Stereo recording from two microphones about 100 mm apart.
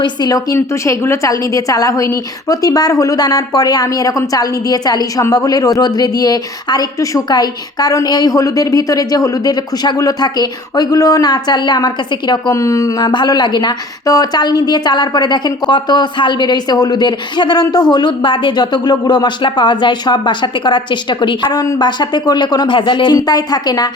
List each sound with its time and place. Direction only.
0.0 s speech: 40° left (ahead or behind)
12.3 s speech: 30° left (ahead or behind)
13.1 s a woman's voice: 45° left (ahead or behind)